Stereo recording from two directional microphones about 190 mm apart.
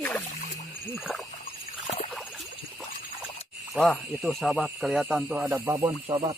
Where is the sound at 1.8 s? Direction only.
30° left (ahead or behind).